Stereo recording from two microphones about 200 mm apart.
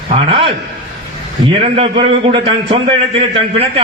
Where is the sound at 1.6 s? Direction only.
30° right (ahead or behind).